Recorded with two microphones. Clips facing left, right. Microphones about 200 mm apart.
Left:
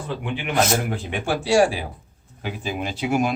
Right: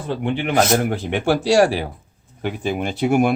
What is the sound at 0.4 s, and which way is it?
Speech, 60° right (ahead or behind).